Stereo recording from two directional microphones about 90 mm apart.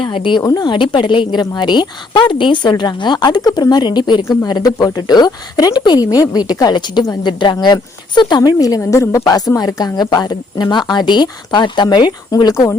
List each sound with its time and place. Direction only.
0.0 s a woman's voice: 65° left (ahead or behind)
0.4 s a woman's voice: 50° left (ahead or behind)
8.4 s speech: 45° left (ahead or behind)
8.8 s a woman's voice: 35° left (ahead or behind)